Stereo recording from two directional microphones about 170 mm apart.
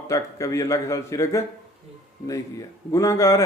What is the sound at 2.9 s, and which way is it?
Speech, 20° left (ahead or behind).